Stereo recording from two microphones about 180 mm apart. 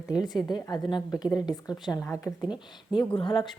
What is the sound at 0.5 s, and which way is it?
A woman's voice, 25° left (ahead or behind).